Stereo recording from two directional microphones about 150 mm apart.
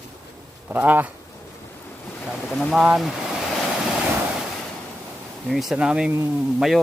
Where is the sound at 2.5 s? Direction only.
Centre (ahead or behind).